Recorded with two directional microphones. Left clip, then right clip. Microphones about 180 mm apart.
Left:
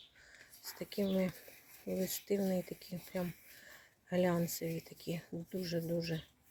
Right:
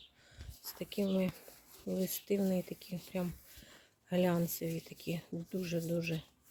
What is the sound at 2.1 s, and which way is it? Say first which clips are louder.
Speech: right 1 dB; 15° right (ahead or behind).